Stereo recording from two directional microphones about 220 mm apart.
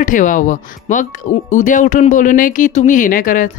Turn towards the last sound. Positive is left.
turn(degrees=40)  # may be behind; listen again after turning